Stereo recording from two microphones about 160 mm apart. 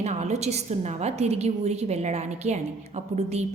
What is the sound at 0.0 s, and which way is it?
A woman's voice, 45° right (ahead or behind).